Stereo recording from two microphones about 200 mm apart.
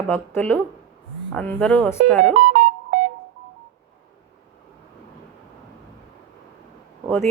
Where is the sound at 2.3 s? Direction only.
45° right (ahead or behind).